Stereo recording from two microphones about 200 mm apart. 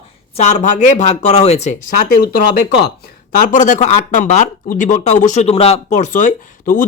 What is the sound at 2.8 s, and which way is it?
Speech, 50° left (ahead or behind).